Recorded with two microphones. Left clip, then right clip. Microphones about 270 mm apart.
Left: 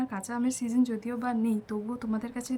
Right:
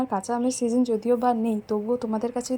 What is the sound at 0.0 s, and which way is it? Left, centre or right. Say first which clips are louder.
A woman's voice: right 7 dB; centre.